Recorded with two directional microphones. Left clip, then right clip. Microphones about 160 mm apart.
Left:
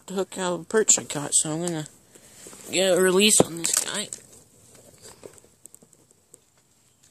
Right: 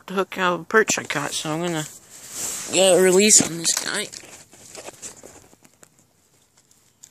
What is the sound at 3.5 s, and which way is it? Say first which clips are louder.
Speech: right 4 dB; 25° right (ahead or behind).